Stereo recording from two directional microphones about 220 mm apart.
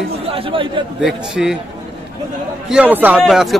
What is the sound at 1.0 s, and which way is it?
Speech, centre (ahead or behind).